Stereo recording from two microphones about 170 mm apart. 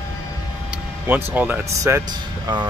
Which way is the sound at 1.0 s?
10° right (ahead or behind).